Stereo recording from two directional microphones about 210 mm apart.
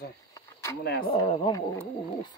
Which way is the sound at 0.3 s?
15° left (ahead or behind).